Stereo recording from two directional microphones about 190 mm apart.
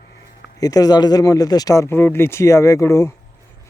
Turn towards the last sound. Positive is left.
turn(degrees=15)  # may be behind; listen again after turning